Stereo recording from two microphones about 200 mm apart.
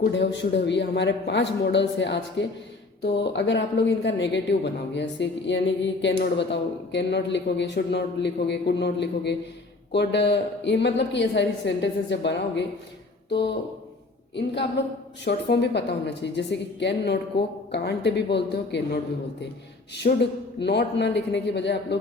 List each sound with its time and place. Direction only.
0.1 s speech: 60° left (ahead or behind)
20.0 s speech: 45° left (ahead or behind)
20.6 s speech: 60° left (ahead or behind)